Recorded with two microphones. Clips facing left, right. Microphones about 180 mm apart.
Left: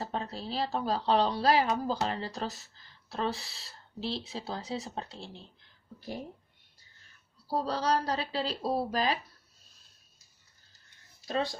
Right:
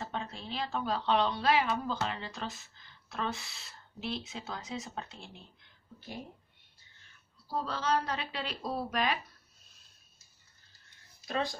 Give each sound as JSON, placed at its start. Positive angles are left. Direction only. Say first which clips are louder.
{"t": 0.0, "sound": "speech", "louder": "left 4 dB", "side_deg": 35}
{"t": 7.4, "sound": "speech", "louder": "left 4 dB", "side_deg": 35}
{"t": 11.2, "sound": "speech", "louder": "left 2 dB", "side_deg": 30}